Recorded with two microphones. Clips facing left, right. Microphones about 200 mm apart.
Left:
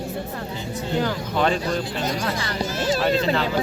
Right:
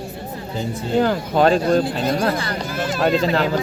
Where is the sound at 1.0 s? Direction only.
45° right (ahead or behind).